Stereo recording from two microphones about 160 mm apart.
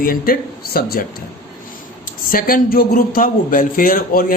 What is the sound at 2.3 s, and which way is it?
A man's voice, 65° left (ahead or behind).